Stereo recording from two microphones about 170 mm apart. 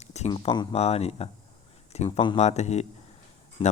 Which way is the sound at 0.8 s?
40° left (ahead or behind).